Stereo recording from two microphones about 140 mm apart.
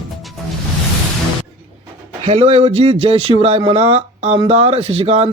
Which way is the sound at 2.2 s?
50° right (ahead or behind).